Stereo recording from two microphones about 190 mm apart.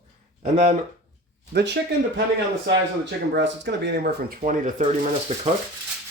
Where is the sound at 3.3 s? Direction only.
65° right (ahead or behind).